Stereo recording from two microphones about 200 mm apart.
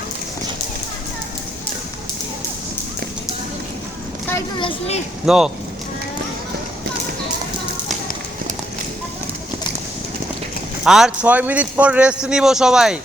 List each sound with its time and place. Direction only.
4.5 s speech: 25° left (ahead or behind)
5.2 s a man's voice: 5° right (ahead or behind)
10.8 s a man's voice: centre (ahead or behind)